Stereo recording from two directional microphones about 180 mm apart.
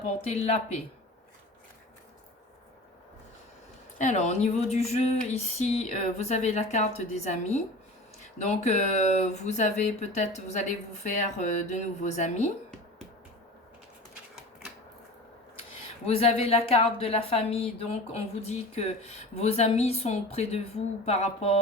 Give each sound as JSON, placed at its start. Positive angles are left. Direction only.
{"t": 0.3, "sound": "a woman's voice", "side_deg": 40}
{"t": 3.9, "sound": "a woman's voice", "side_deg": 40}
{"t": 16.0, "sound": "a woman's voice", "side_deg": 35}